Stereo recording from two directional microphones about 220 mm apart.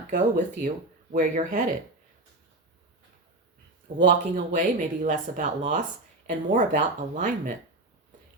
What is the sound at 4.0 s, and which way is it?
Speech, 35° right (ahead or behind).